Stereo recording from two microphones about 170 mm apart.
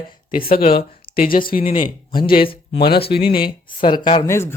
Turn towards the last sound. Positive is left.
turn(degrees=15)  # may be behind; listen again after turning